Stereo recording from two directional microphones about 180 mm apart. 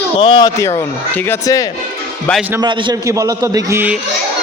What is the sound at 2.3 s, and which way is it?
Speech, 5° right (ahead or behind).